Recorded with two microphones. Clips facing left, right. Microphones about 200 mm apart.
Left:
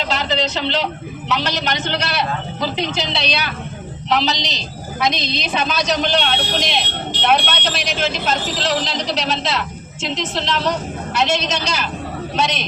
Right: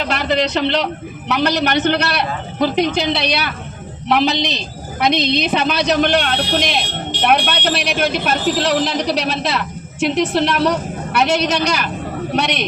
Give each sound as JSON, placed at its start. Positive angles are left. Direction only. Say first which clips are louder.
{"t": 0.1, "sound": "a man's voice", "louder": "right 5 dB", "side_deg": -60}